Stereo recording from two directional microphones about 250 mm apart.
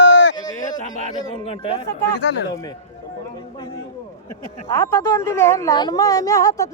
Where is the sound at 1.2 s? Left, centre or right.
Left.